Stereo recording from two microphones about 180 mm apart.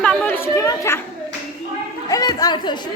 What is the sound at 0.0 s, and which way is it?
Chatter, 10° left (ahead or behind).